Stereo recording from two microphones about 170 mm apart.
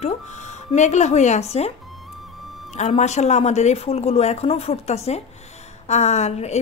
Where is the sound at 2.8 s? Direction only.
40° left (ahead or behind).